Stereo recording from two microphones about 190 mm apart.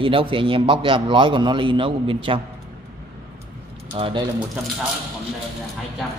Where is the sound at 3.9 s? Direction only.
30° right (ahead or behind).